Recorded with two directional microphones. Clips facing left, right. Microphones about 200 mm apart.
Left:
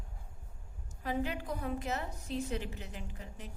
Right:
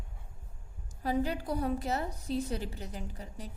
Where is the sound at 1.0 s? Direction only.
35° right (ahead or behind).